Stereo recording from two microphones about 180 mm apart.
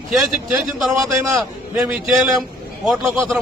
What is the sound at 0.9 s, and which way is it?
Speech, 15° right (ahead or behind).